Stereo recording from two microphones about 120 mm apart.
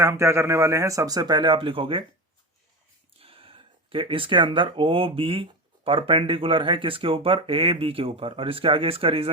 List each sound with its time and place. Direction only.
0.0 s speech: 25° right (ahead or behind); by 2.0 s 45° right (ahead or behind)
3.2 s speech: 50° right (ahead or behind)